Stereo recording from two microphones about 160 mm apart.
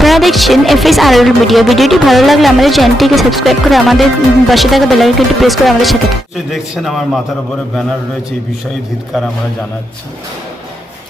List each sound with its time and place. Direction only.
0.0 s speech: centre (ahead or behind)